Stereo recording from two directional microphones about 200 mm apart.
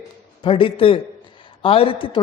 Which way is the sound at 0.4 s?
25° left (ahead or behind).